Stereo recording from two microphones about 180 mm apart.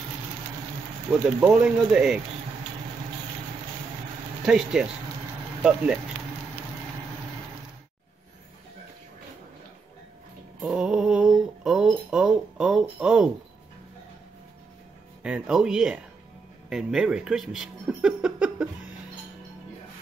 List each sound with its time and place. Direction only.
1.4 s speech: 5° right (ahead or behind)
4.5 s speech: 5° right (ahead or behind)
10.6 s speech: 5° right (ahead or behind)
15.2 s speech: 5° right (ahead or behind)